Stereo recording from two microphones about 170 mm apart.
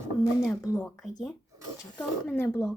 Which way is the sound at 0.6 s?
20° left (ahead or behind).